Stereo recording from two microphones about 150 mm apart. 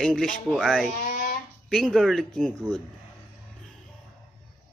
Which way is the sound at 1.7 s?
Centre (ahead or behind).